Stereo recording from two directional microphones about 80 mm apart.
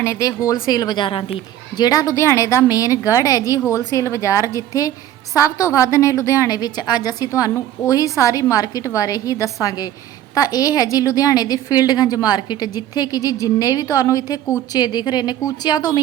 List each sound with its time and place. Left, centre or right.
0.0 s speech: left
0.7 s a woman's voice: left